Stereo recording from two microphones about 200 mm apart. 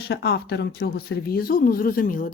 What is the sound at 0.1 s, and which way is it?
Speech, 50° left (ahead or behind).